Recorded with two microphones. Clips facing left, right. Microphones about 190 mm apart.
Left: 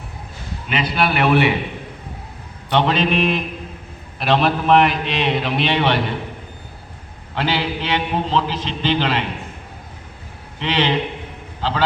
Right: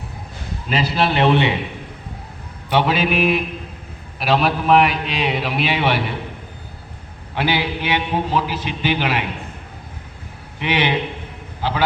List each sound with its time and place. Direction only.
0.7 s a man's voice: 30° right (ahead or behind)
2.6 s a man's voice: 5° right (ahead or behind)
7.3 s a man's voice: 10° right (ahead or behind)
10.6 s a man's voice: 10° right (ahead or behind)